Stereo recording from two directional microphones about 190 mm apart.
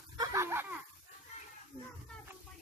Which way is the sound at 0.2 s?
15° right (ahead or behind).